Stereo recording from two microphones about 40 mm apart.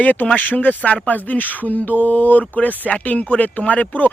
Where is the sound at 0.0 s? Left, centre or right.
Left.